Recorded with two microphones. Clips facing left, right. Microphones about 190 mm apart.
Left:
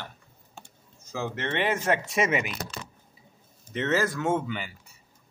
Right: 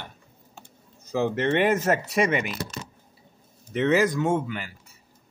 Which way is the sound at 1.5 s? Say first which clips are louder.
Right 2 dB; 45° right (ahead or behind).